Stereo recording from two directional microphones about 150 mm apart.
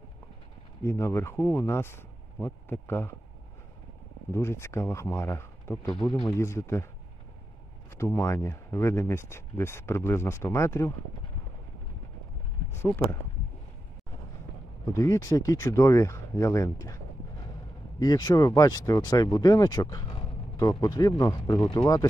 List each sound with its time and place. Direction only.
0.8 s speech: 15° left (ahead or behind)
4.3 s speech: 15° left (ahead or behind)
5.9 s speech: 5° left (ahead or behind)
6.2 s speech: 20° left (ahead or behind)
8.0 s speech: 15° left (ahead or behind)
12.7 s speech: 15° left (ahead or behind)
15.0 s speech: 20° left (ahead or behind)